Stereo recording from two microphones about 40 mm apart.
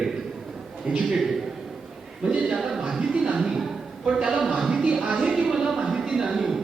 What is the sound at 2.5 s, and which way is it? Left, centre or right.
Speech, centre.